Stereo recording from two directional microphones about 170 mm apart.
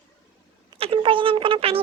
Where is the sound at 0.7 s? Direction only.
35° right (ahead or behind).